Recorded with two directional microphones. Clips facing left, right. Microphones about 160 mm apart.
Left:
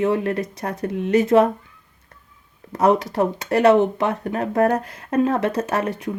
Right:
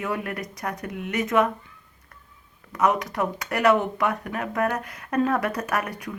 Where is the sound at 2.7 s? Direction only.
30° left (ahead or behind).